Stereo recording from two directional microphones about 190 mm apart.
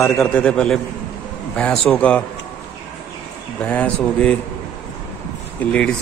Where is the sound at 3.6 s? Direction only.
5° left (ahead or behind).